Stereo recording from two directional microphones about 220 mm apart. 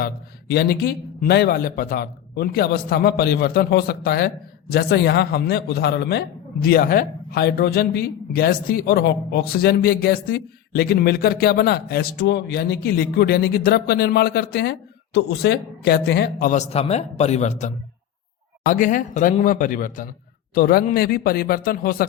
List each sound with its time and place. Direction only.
0.0 s a man's voice: 45° left (ahead or behind)